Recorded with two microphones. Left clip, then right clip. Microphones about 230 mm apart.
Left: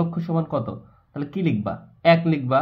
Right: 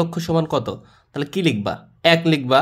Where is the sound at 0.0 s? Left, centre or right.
Right.